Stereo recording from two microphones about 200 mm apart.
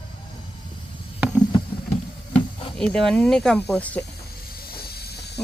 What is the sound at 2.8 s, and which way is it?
Speech, 5° left (ahead or behind).